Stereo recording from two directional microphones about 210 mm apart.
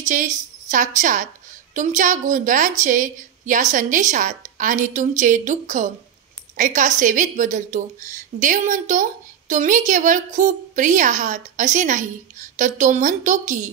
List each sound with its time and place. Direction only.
0.0 s a woman's voice: 35° right (ahead or behind)